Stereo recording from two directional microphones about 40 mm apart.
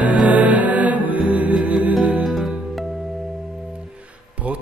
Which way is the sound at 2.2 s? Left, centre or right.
Centre.